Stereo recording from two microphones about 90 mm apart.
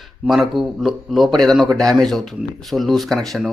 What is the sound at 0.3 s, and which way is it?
Speech, centre (ahead or behind).